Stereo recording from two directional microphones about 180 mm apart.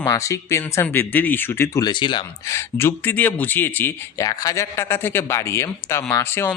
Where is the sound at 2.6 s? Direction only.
15° left (ahead or behind).